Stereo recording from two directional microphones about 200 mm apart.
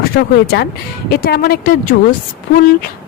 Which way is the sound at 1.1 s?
50° left (ahead or behind).